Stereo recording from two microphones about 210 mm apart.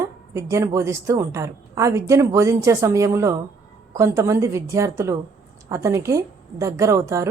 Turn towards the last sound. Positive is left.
turn(degrees=-15)  # may be behind; listen again after turning